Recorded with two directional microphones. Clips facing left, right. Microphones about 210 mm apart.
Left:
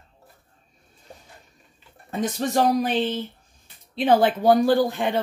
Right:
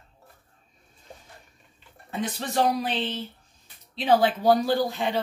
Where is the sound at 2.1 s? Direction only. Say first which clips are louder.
Left 6 dB; 45° left (ahead or behind).